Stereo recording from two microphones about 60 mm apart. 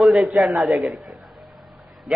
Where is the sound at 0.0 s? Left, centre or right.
Centre.